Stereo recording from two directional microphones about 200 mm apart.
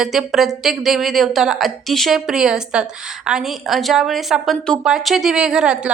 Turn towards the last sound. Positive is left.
turn(degrees=-5)  # may be behind; listen again after turning